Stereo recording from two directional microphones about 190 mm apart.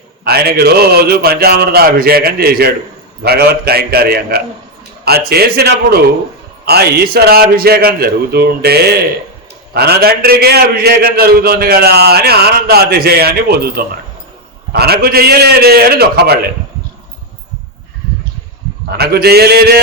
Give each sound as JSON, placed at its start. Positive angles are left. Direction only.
{"t": 0.3, "sound": "a man's voice", "side_deg": -55}
{"t": 18.9, "sound": "a man's voice", "side_deg": -55}